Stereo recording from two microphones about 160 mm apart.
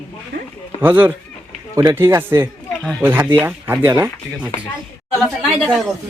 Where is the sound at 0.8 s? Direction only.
10° right (ahead or behind).